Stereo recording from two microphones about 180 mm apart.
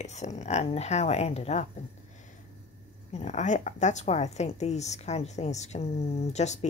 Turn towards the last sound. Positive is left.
turn(degrees=40)  # may be behind; listen again after turning